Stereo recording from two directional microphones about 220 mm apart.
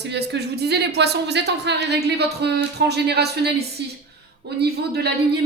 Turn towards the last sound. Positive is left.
turn(degrees=-50)  # may be behind; listen again after turning